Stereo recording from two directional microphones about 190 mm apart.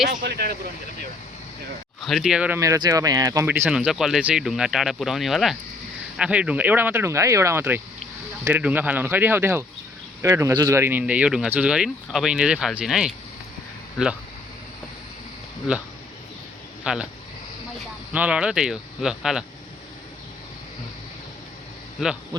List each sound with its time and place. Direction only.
0.3 s speech: 55° right (ahead or behind)
2.0 s speech: centre (ahead or behind)
16.8 s speech: 5° right (ahead or behind)
18.1 s speech: 5° right (ahead or behind)